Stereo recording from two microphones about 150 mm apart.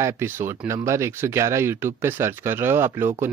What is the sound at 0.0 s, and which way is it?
Speech, 15° right (ahead or behind).